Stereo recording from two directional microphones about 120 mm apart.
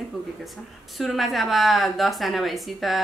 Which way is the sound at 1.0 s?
Centre (ahead or behind).